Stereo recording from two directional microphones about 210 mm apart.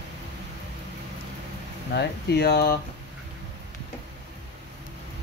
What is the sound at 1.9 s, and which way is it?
Speech, 50° left (ahead or behind).